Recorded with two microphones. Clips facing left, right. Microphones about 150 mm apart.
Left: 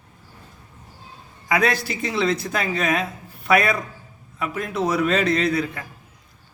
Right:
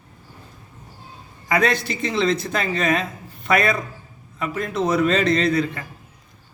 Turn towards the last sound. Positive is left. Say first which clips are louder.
# right 2 dB
turn(degrees=10)  # may be behind; listen again after turning